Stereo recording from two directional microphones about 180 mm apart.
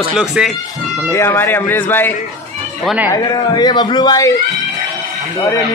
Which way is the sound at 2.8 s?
Centre (ahead or behind).